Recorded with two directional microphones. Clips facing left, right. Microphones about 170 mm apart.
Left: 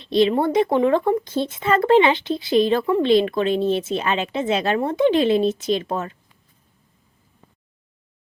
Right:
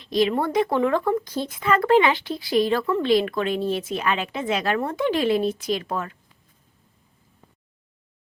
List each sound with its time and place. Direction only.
0.0 s speech: 25° left (ahead or behind)